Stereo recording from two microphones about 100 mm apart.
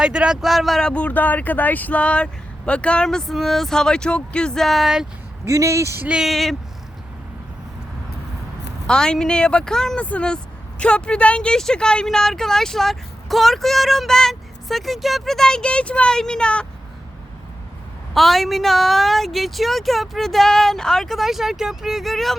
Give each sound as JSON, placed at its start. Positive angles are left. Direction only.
{"t": 0.0, "sound": "speech", "side_deg": -10}
{"t": 5.5, "sound": "speech", "side_deg": -30}
{"t": 6.1, "sound": "speech", "side_deg": -5}
{"t": 8.9, "sound": "speech", "side_deg": 5}
{"t": 18.1, "sound": "speech", "side_deg": 0}